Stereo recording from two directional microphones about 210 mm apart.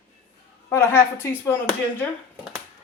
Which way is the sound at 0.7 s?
10° left (ahead or behind).